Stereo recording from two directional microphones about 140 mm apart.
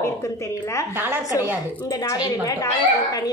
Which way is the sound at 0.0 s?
20° left (ahead or behind).